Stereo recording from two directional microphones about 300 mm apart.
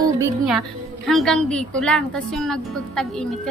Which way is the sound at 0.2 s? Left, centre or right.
Centre.